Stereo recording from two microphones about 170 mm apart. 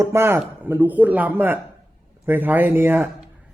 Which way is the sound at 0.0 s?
15° right (ahead or behind).